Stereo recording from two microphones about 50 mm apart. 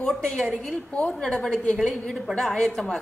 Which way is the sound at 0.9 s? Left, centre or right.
Left.